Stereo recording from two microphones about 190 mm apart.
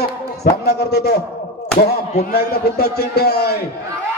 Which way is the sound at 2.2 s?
60° left (ahead or behind).